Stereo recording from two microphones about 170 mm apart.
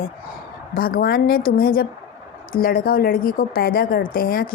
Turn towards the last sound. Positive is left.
turn(degrees=60)  # may be behind; listen again after turning